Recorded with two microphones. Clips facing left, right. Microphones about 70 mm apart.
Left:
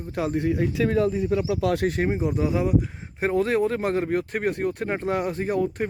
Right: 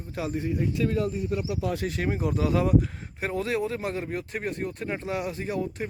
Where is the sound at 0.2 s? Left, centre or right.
Left.